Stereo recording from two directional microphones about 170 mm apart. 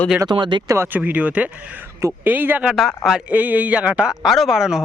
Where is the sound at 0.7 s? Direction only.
15° right (ahead or behind).